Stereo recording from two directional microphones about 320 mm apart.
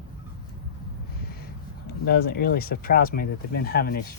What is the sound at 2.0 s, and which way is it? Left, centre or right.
Speech, left.